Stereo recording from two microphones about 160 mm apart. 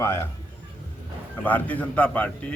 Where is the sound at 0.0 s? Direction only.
15° left (ahead or behind).